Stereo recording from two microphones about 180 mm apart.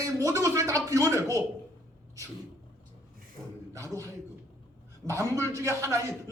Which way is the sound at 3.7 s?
15° right (ahead or behind).